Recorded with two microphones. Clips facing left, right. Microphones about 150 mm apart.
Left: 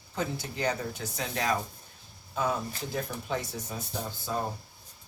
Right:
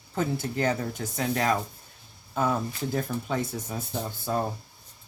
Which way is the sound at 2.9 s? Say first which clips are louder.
Right 3 dB; 50° right (ahead or behind).